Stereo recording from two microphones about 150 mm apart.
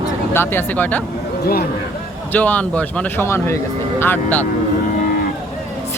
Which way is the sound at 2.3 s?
10° left (ahead or behind).